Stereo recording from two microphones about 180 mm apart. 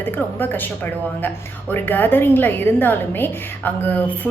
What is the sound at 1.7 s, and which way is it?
A woman's voice, 10° left (ahead or behind).